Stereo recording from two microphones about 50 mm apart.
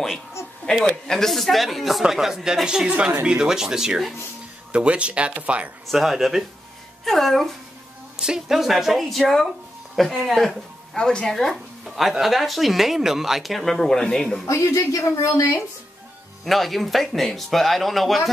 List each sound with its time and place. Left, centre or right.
1.0 s speech: centre
4.7 s speech: right
5.9 s speech: centre
8.2 s speech: centre
11.0 s speech: centre
11.9 s speech: centre
14.4 s speech: left
16.4 s speech: centre